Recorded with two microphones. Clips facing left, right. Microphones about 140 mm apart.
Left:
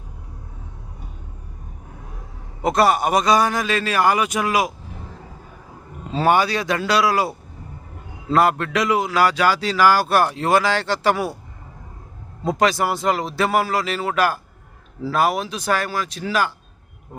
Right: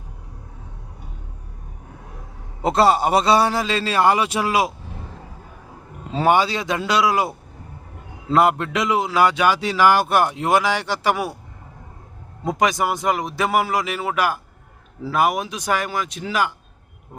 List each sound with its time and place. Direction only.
2.6 s a man's voice: 25° right (ahead or behind)
6.1 s a man's voice: 20° right (ahead or behind)
12.5 s a man's voice: 15° right (ahead or behind)